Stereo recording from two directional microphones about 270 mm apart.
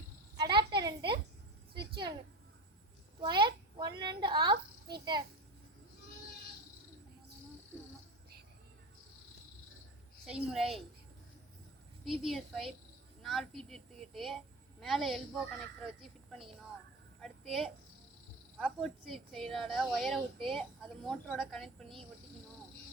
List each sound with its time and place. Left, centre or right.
0.3 s a sound: centre
3.2 s a child's voice: centre
10.2 s speech: centre
12.0 s a woman's voice: centre
17.2 s a sound: centre
18.5 s speech: centre